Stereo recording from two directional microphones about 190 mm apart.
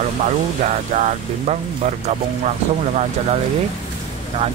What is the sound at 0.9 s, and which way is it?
Speech, 40° right (ahead or behind).